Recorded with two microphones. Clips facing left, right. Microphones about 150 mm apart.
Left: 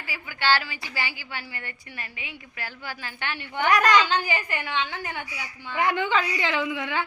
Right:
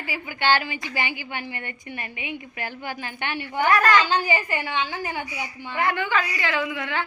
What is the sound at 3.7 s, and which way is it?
Speech, 15° left (ahead or behind).